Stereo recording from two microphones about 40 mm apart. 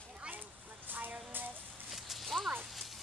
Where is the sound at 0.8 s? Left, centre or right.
Right.